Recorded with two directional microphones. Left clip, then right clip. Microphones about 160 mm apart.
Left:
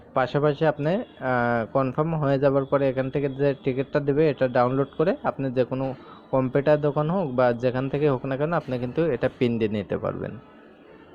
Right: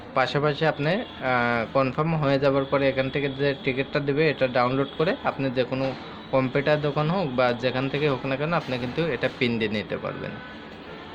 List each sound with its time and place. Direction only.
0.1 s a man's voice: 40° left (ahead or behind)